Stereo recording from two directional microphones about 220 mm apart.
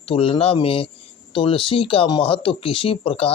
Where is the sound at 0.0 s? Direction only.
25° left (ahead or behind).